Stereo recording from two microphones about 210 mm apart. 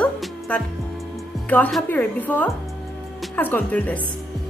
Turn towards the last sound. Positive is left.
turn(degrees=5)  # may be behind; listen again after turning